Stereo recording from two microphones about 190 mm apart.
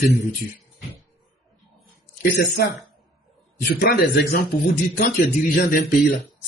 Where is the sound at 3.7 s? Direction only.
55° left (ahead or behind).